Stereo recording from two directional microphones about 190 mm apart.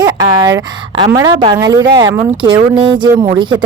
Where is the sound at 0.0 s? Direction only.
20° right (ahead or behind).